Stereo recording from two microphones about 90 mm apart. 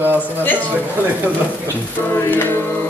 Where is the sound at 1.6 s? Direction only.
20° left (ahead or behind).